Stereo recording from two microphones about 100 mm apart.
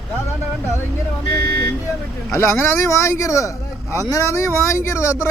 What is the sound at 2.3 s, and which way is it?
Speech, 25° left (ahead or behind).